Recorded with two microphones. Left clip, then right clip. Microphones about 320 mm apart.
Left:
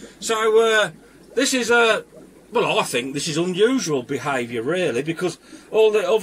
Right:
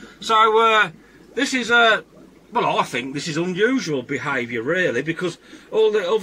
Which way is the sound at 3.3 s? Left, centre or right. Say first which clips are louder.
Left 1 dB; centre.